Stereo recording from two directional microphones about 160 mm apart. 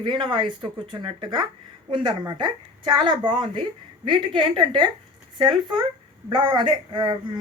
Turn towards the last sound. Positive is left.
turn(degrees=-30)  # may be behind; listen again after turning